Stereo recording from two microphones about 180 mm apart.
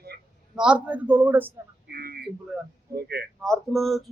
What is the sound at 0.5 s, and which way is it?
Speech, 5° right (ahead or behind).